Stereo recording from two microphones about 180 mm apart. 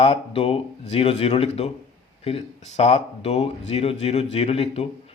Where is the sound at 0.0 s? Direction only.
30° left (ahead or behind).